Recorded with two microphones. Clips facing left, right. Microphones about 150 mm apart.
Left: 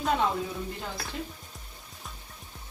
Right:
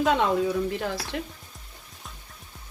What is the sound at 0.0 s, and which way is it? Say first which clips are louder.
Speech: right 4 dB; 90° right.